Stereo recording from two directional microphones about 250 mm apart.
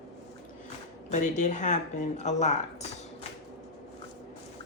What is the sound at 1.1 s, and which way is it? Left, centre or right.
Speech, left.